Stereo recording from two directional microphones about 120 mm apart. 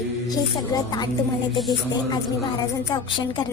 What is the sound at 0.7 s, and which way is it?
Speech, 30° left (ahead or behind).